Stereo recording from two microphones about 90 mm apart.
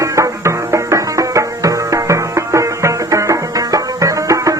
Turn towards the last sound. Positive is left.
turn(degrees=-40)  # may be behind; listen again after turning